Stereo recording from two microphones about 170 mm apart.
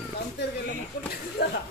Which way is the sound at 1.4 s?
70° left (ahead or behind).